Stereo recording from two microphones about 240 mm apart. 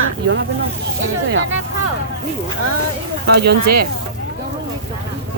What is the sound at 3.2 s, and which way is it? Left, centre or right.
Speech, right.